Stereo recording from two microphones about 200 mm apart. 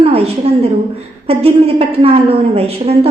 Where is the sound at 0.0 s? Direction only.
30° right (ahead or behind).